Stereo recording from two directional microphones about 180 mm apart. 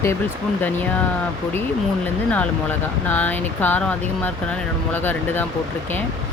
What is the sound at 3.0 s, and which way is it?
Speech, 10° left (ahead or behind).